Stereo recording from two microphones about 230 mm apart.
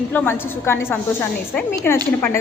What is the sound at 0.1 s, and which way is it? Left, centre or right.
A woman's voice, centre.